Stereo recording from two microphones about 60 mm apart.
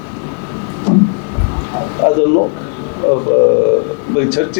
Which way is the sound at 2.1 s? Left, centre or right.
Left.